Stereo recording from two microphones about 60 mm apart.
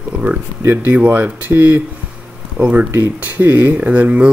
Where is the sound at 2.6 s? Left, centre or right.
Right.